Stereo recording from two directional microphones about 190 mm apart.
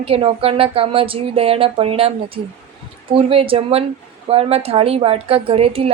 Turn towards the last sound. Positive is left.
turn(degrees=-30)  # may be behind; listen again after turning